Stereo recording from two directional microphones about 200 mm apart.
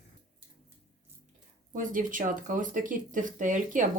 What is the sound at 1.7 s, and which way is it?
Speech, 40° right (ahead or behind).